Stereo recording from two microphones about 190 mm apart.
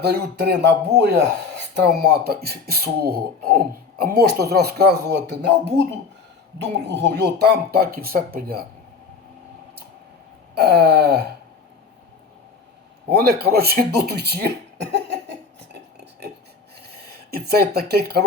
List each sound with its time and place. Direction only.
0.0 s speech: 60° right (ahead or behind)
10.5 s speech: 60° right (ahead or behind)
13.1 s speech: 55° right (ahead or behind)
16.2 s filing: 60° right (ahead or behind)
17.3 s speech: 55° right (ahead or behind)